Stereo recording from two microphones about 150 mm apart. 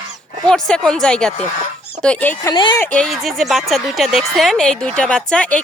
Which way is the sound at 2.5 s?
30° left (ahead or behind).